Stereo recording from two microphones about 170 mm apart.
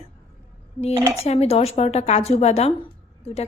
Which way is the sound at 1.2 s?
40° left (ahead or behind).